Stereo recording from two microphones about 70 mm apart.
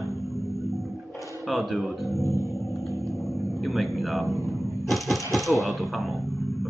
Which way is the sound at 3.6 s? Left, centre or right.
Centre.